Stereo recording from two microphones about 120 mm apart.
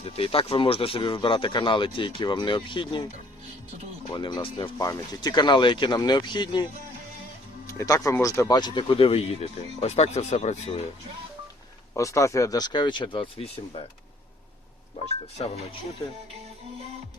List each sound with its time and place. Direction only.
0.0 s speech: 50° left (ahead or behind)
4.1 s speech: 40° left (ahead or behind)
4.8 s speech: 30° left (ahead or behind)
7.7 s speech: 25° left (ahead or behind); by 10.8 s 65° left (ahead or behind)
11.9 s speech: 25° left (ahead or behind); by 13.8 s 50° left (ahead or behind)
15.4 s speech: 55° left (ahead or behind)